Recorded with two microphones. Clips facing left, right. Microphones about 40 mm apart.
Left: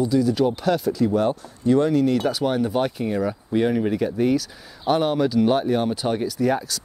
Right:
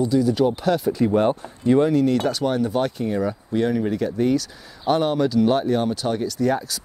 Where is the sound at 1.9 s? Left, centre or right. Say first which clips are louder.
Right 1 dB; centre.